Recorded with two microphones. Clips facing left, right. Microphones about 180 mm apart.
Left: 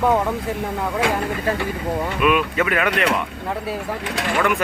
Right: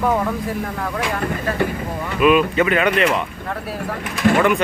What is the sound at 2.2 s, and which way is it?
Speech, centre (ahead or behind).